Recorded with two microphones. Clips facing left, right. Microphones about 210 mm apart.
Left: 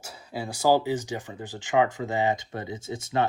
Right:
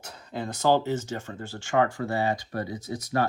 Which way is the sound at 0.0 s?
10° left (ahead or behind).